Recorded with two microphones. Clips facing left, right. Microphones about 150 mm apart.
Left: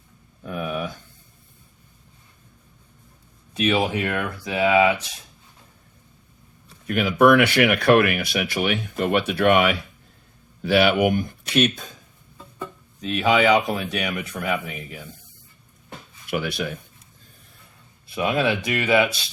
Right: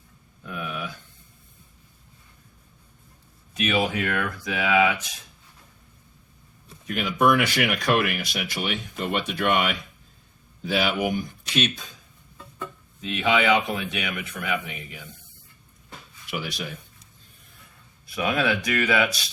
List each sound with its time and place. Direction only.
0.4 s a sound: 40° left (ahead or behind)
3.5 s speech: 30° left (ahead or behind)
6.8 s speech: 60° left (ahead or behind)
13.0 s speech: 35° left (ahead or behind)
16.3 s speech: 55° left (ahead or behind)
18.0 s speech: 25° left (ahead or behind)